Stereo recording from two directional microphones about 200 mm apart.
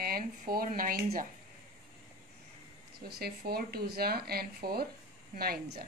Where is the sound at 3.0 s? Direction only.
50° right (ahead or behind).